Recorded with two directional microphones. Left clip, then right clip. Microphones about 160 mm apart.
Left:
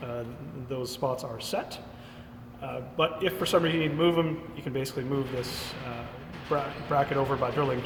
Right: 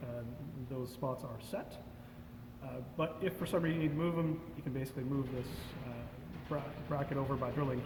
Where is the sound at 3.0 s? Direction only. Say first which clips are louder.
Left 10 dB; 30° left (ahead or behind).